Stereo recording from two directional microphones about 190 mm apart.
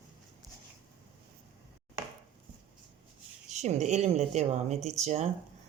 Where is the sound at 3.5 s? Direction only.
35° right (ahead or behind).